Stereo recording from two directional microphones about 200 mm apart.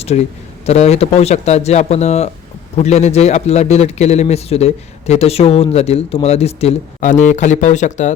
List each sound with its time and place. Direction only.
0.1 s a man's voice: 35° left (ahead or behind)